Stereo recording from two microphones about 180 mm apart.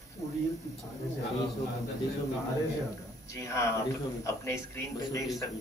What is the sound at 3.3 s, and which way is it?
A man's voice, 15° left (ahead or behind).